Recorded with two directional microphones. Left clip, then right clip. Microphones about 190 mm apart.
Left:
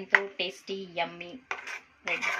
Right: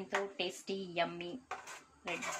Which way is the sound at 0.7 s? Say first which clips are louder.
Left 4 dB; 15° right (ahead or behind).